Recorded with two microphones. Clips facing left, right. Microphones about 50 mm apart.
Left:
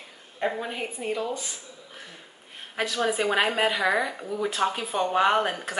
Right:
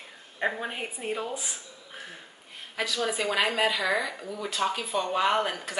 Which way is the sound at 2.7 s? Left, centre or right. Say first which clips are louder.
Left 3 dB; left.